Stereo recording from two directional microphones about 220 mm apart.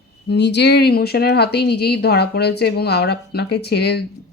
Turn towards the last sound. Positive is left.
turn(degrees=50)  # may be behind; listen again after turning